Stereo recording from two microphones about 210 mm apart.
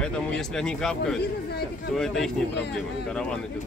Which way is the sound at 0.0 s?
5° left (ahead or behind).